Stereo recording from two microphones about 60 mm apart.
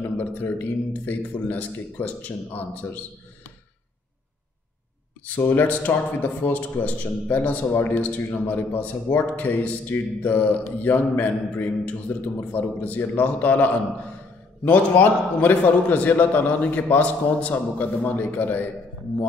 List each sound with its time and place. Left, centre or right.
0.2 s a man's voice: left
5.2 s a man's voice: left